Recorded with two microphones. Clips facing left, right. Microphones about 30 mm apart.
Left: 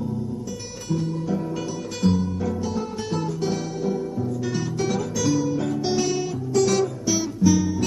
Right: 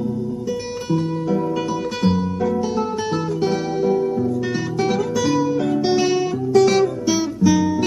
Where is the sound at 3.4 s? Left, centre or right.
Right.